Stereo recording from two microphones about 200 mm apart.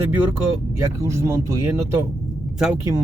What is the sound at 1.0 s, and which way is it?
Speech, 15° right (ahead or behind).